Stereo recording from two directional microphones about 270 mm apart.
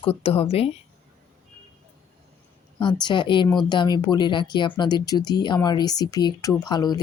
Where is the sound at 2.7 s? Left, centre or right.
Centre.